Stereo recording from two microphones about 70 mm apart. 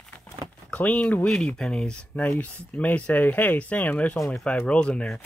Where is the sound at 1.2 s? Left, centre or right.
Centre; by 4.1 s left.